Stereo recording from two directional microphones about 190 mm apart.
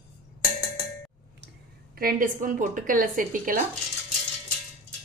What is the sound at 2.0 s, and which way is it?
A woman's voice, 50° right (ahead or behind).